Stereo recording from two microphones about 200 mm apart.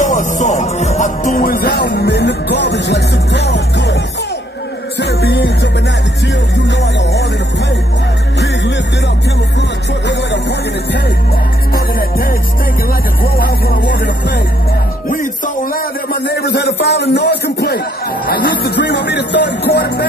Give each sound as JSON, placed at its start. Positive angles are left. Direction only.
{"t": 0.0, "sound": "music", "side_deg": 40}
{"t": 8.4, "sound": "music", "side_deg": 60}
{"t": 11.7, "sound": "music", "side_deg": 45}
{"t": 15.0, "sound": "music", "side_deg": 45}